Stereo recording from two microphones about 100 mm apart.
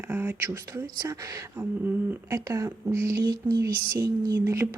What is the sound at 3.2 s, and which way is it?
Speech, 40° right (ahead or behind).